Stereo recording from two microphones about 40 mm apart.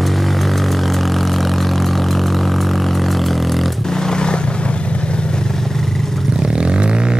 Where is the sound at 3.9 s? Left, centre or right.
Centre.